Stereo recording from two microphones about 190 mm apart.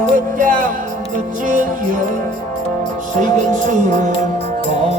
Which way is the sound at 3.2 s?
40° right (ahead or behind).